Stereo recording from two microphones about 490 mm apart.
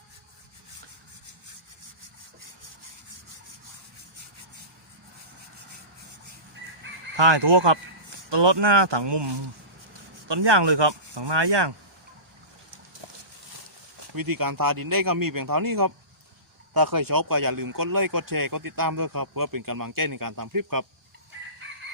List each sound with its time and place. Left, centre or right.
7.2 s speech: right
14.2 s speech: right